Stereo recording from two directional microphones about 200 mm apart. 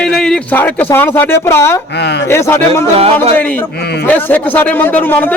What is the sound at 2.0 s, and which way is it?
Speech, 60° left (ahead or behind).